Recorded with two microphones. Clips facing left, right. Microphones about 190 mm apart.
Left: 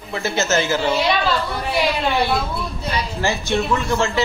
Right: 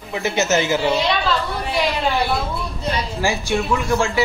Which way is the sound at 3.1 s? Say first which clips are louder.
Left 1 dB; 10° right (ahead or behind).